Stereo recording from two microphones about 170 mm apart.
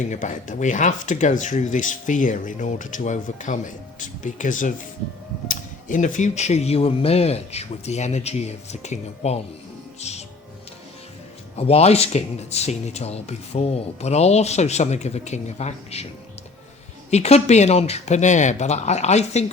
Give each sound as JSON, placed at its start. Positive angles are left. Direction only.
{"t": 0.1, "sound": "speech", "side_deg": 45}
{"t": 11.5, "sound": "speech", "side_deg": 35}
{"t": 17.1, "sound": "speech", "side_deg": 40}